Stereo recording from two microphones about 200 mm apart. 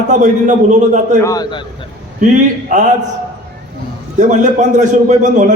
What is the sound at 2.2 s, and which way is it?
Speech, 40° right (ahead or behind).